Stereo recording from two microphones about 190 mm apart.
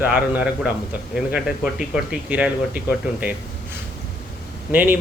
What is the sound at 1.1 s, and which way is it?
Speech, 5° right (ahead or behind).